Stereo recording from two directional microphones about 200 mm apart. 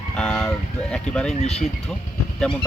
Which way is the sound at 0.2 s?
5° left (ahead or behind).